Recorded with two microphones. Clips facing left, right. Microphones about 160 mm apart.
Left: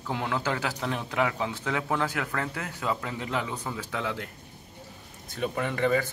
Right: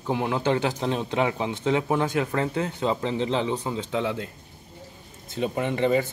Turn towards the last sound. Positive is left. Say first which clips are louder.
# right 3 dB
turn(degrees=-20)  # may be behind; listen again after turning